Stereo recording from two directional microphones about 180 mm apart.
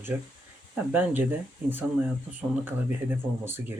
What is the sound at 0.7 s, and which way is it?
Speech, 10° right (ahead or behind).